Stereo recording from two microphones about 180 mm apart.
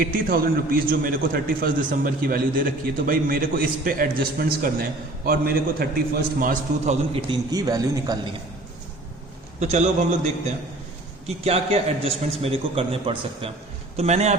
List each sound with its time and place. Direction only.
0.0 s a man's voice: 50° right (ahead or behind)
7.1 s speech: 25° right (ahead or behind)
9.6 s a man's voice: 40° right (ahead or behind)